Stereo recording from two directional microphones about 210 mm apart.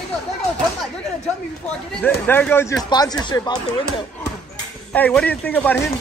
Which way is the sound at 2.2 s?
10° left (ahead or behind).